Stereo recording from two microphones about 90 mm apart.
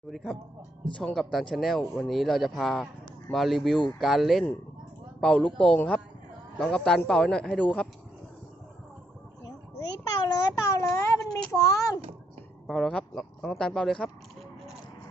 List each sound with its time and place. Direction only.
0.1 s speech: 5° left (ahead or behind)
5.2 s speech: 15° left (ahead or behind)
9.4 s a sound: 45° left (ahead or behind)
10.8 s speech: 35° left (ahead or behind)
12.6 s a sound: 5° left (ahead or behind)
13.5 s speech: 10° left (ahead or behind)